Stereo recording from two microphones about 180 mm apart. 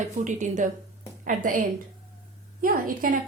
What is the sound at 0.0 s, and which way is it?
A woman's voice, 45° right (ahead or behind).